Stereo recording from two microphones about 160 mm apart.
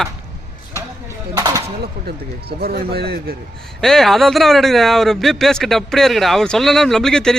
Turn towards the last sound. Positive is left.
turn(degrees=5)  # may be behind; listen again after turning